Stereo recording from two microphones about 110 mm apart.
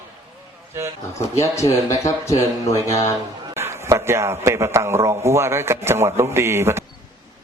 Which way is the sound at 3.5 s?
25° right (ahead or behind).